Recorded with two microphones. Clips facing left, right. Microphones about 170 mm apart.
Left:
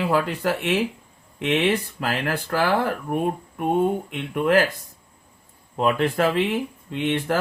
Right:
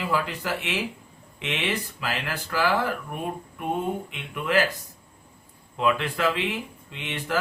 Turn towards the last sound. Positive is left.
turn(degrees=50)  # may be behind; listen again after turning